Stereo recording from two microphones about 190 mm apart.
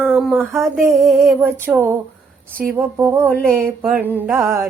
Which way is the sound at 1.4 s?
10° right (ahead or behind).